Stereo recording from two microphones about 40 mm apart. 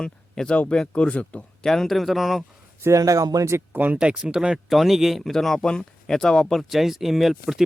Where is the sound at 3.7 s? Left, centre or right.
Right.